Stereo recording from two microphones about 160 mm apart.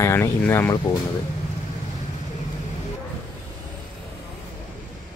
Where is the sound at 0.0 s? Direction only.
15° left (ahead or behind).